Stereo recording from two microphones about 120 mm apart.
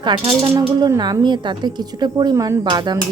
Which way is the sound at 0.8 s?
35° right (ahead or behind).